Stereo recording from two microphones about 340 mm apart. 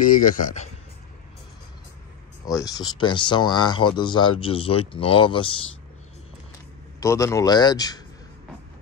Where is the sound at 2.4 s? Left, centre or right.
Centre.